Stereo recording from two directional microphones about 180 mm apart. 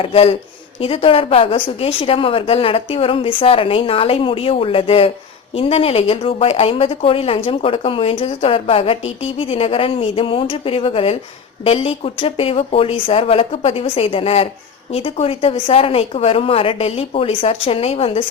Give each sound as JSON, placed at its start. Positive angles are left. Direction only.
{"t": 0.0, "sound": "speech", "side_deg": 30}